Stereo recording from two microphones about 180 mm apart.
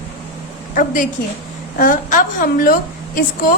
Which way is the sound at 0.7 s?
50° left (ahead or behind).